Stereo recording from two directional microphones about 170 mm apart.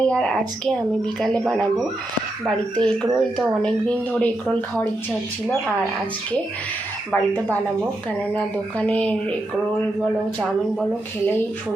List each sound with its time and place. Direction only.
0.0 s a woman's voice: 5° left (ahead or behind)
2.8 s a woman's voice: 5° left (ahead or behind)
7.1 s speech: 10° left (ahead or behind)
8.8 s speech: 10° left (ahead or behind)